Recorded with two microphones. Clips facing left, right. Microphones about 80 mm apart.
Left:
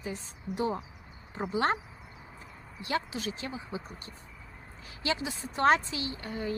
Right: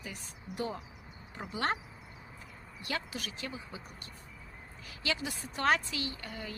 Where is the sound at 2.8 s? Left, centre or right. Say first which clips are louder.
Left 6 dB; left.